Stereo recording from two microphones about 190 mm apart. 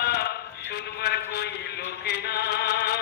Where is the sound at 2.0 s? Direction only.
55° left (ahead or behind).